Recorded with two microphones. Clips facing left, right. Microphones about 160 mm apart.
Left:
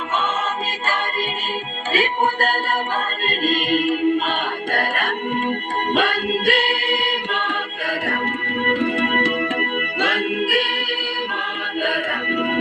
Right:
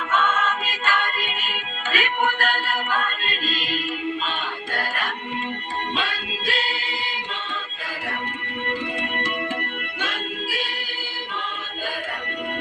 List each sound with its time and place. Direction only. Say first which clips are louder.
0.1 s music: right 1 dB; 30° left (ahead or behind); by 7.6 s 65° left (ahead or behind)
8.6 s organ: left 8 dB; 60° left (ahead or behind)